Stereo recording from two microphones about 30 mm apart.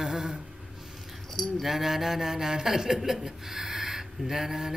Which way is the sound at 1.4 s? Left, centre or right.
Centre.